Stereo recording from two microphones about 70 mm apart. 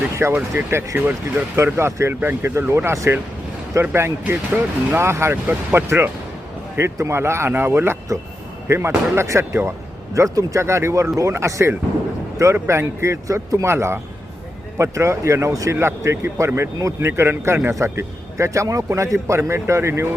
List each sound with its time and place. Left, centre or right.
0.2 s speech: right
0.9 s speech: right
1.5 s speech: right
10.2 s speech: right